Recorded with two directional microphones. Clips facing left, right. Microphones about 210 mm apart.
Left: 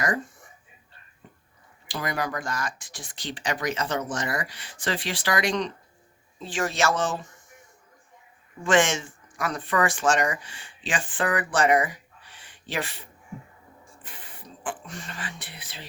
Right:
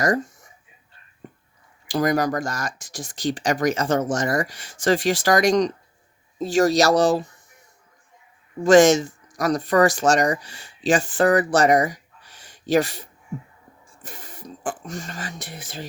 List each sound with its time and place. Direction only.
0.0 s speech: 40° right (ahead or behind)
1.2 s whispering: 50° right (ahead or behind)
1.9 s speech: 40° right (ahead or behind)
8.6 s speech: 40° right (ahead or behind)